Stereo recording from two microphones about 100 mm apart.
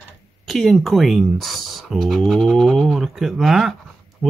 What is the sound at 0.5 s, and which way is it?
Speech, centre (ahead or behind).